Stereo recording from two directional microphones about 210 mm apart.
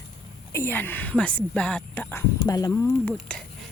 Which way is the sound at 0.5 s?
10° left (ahead or behind).